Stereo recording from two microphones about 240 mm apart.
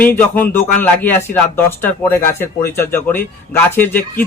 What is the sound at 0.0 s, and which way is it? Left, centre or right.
A man's voice, centre.